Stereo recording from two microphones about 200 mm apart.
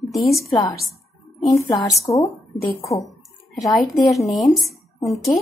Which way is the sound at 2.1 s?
15° left (ahead or behind).